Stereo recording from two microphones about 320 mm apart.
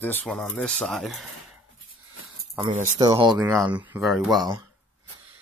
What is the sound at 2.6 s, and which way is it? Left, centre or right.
Speech, right.